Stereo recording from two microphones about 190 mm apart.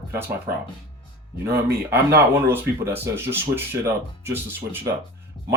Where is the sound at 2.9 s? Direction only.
10° right (ahead or behind).